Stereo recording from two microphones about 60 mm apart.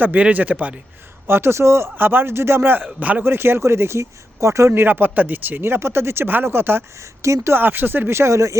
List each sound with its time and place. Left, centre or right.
0.0 s speech: right
1.3 s speech: right
3.2 s speech: right
4.7 s speech: right
7.5 s speech: right